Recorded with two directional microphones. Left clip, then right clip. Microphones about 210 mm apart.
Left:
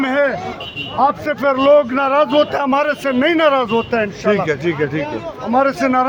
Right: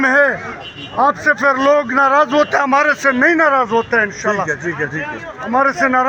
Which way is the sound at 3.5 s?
15° right (ahead or behind).